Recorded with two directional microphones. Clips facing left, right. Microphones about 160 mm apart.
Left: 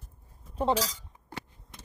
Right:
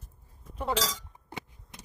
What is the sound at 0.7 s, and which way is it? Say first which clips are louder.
Speech: left 1 dB; 90° right.